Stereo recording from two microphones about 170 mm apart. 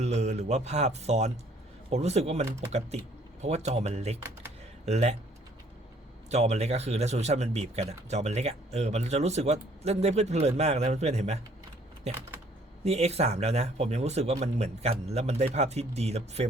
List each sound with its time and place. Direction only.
0.0 s speech: 40° right (ahead or behind)
6.3 s speech: 40° right (ahead or behind)